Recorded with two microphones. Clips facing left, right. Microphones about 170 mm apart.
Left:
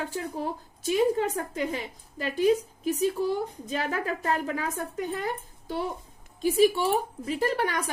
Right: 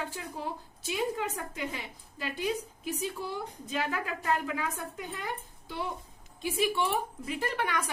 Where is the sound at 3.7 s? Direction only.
45° left (ahead or behind).